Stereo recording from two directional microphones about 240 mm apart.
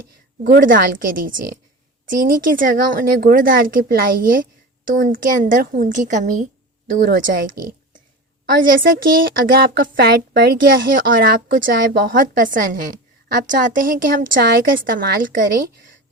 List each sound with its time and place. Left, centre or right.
0.4 s a woman's voice: right
8.6 s a woman's voice: right